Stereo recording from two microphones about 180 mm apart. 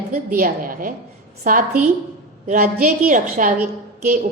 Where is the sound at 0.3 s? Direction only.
50° right (ahead or behind).